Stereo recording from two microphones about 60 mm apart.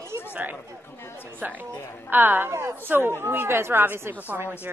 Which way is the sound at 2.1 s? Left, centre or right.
Right.